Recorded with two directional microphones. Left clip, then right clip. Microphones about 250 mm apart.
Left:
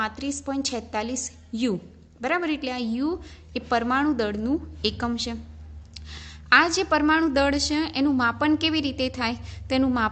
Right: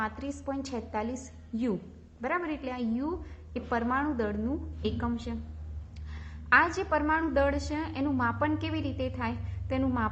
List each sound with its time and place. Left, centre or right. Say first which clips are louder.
0.0 s a woman's voice: left 6 dB; left